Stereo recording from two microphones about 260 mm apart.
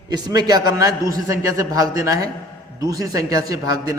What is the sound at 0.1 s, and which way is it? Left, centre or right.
A man's voice, centre.